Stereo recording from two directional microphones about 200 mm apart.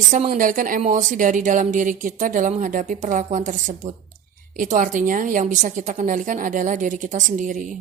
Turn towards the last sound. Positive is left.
turn(degrees=-40)  # may be behind; listen again after turning